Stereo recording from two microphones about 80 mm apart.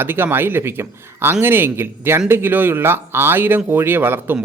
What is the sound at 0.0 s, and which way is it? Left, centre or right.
A man's voice, right.